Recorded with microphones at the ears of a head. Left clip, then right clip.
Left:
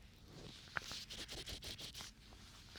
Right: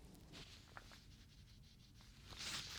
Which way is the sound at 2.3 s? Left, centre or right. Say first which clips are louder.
Right 11 dB; right.